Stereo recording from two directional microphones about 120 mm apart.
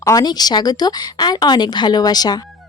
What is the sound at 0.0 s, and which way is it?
Speech, 30° left (ahead or behind).